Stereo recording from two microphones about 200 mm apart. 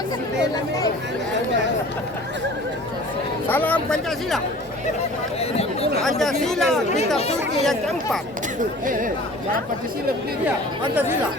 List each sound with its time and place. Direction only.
3.4 s speech: 10° left (ahead or behind)
5.4 s chatter: 30° left (ahead or behind)
6.0 s speech: centre (ahead or behind)